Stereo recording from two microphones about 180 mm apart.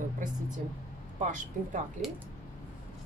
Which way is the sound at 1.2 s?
45° right (ahead or behind).